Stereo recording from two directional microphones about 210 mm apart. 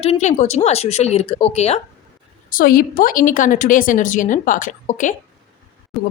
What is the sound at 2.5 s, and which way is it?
Speech, 40° left (ahead or behind).